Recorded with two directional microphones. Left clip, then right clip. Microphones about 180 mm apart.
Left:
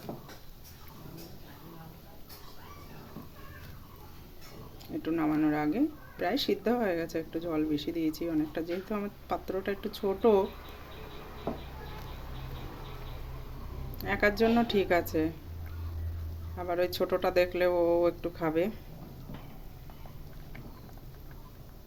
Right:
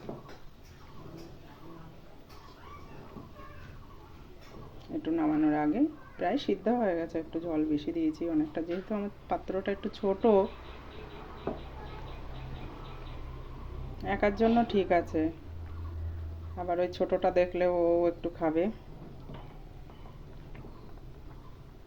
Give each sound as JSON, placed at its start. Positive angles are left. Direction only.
{"t": 5.0, "sound": "speech", "side_deg": 5}
{"t": 14.0, "sound": "speech", "side_deg": 5}
{"t": 16.6, "sound": "speech", "side_deg": 5}